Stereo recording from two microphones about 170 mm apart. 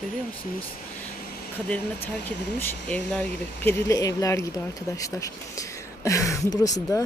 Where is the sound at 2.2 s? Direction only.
10° left (ahead or behind).